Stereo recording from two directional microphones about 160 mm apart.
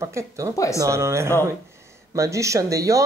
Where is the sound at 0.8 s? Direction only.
20° right (ahead or behind).